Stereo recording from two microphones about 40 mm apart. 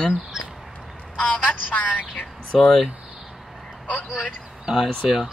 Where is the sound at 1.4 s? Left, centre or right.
Left.